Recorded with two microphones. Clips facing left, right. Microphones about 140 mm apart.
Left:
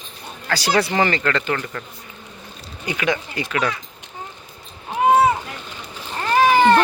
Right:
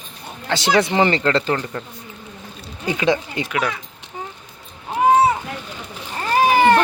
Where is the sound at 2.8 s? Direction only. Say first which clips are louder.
Right 4 dB; 25° right (ahead or behind).